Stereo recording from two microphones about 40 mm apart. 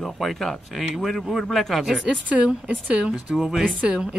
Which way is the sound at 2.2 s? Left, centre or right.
Right.